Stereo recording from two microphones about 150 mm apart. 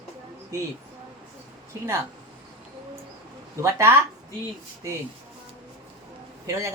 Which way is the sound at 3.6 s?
20° right (ahead or behind).